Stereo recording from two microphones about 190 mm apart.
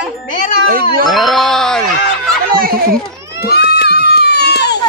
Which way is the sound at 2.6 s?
50° right (ahead or behind).